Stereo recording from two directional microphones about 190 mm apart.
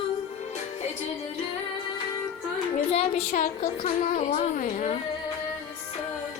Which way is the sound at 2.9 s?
35° left (ahead or behind).